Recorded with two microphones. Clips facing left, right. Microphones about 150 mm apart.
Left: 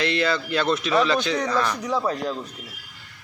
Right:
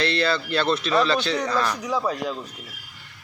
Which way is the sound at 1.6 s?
10° right (ahead or behind).